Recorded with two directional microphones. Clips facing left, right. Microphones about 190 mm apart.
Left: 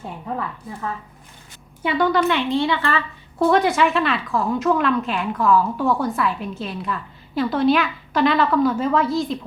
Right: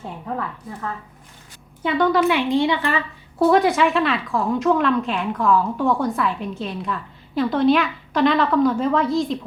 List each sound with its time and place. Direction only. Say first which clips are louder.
1.8 s a woman's voice: right 1 dB; 5° left (ahead or behind)
2.2 s a woman's voice: right 2 dB; 15° right (ahead or behind)
3.5 s a woman's voice: even; centre (ahead or behind)